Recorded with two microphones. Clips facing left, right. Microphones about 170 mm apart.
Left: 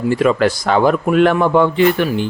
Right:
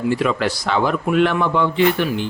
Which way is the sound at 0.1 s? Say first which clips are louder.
Left 7 dB; 50° left (ahead or behind).